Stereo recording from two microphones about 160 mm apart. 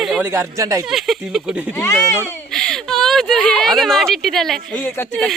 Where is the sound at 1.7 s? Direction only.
15° left (ahead or behind).